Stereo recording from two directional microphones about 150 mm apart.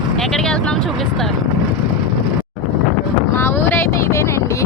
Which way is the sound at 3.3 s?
15° left (ahead or behind).